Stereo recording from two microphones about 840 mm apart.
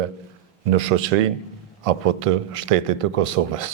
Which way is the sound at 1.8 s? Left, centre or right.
Right.